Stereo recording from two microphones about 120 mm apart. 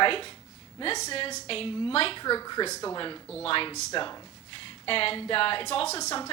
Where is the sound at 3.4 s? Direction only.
50° left (ahead or behind).